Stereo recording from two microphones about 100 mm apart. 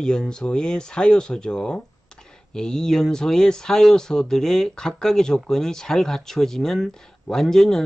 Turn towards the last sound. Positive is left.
turn(degrees=5)  # may be behind; listen again after turning